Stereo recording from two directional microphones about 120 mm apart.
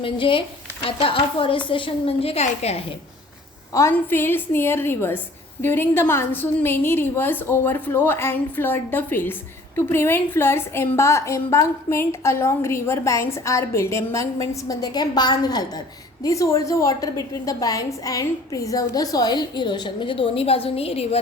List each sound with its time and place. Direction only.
0.0 s a woman's voice: 45° left (ahead or behind); by 2.8 s 60° left (ahead or behind)
3.7 s a woman's voice: 25° left (ahead or behind); by 21.2 s 55° left (ahead or behind)